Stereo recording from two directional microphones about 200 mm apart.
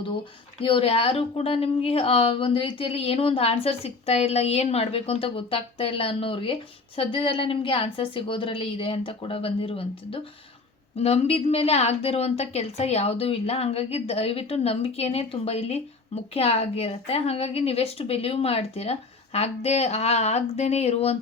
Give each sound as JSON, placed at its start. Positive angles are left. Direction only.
{"t": 0.6, "sound": "a woman's voice", "side_deg": 30}